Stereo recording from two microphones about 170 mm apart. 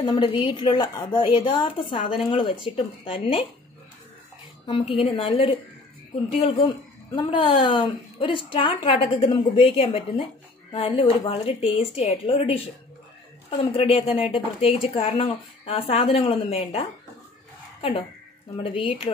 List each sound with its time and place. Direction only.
0.1 s a woman's voice: 30° left (ahead or behind)
4.6 s a woman's voice: 30° left (ahead or behind)
7.2 s a woman's voice: 30° left (ahead or behind)
18.6 s a woman's voice: 30° left (ahead or behind)